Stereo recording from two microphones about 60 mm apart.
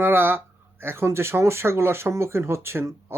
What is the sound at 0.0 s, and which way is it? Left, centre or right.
Speech, right.